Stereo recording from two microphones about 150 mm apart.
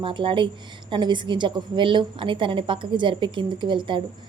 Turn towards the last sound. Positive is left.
turn(degrees=-30)  # may be behind; listen again after turning